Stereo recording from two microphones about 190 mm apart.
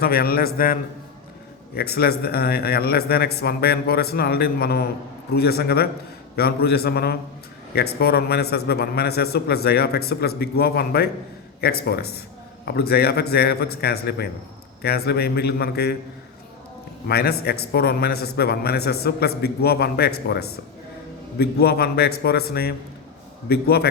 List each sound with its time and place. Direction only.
0.0 s a man's voice: 50° left (ahead or behind)
17.1 s a man's voice: 55° left (ahead or behind)